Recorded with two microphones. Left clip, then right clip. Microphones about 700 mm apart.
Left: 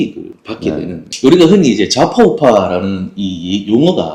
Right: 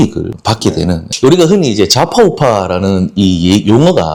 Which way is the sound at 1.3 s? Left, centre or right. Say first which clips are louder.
Left 1 dB; right.